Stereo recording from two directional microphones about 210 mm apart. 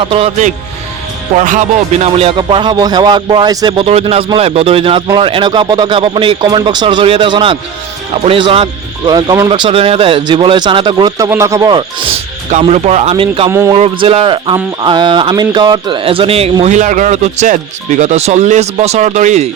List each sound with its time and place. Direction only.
0.0 s speech: 25° right (ahead or behind)
12.5 s speech: 30° right (ahead or behind)
13.5 s music: 15° right (ahead or behind)
13.7 s speech: 25° right (ahead or behind)